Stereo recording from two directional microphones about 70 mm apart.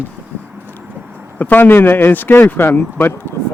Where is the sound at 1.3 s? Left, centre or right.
Left.